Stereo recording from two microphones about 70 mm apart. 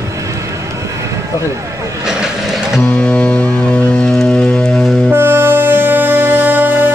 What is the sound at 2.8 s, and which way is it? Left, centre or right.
Music, centre.